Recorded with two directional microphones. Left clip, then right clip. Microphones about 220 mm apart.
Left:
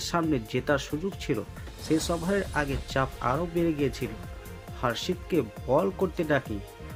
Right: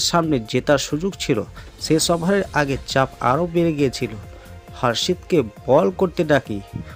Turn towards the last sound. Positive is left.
turn(degrees=-35)  # may be behind; listen again after turning